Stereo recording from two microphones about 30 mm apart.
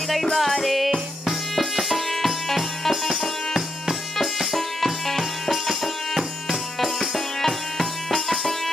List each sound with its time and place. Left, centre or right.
0.1 s music: centre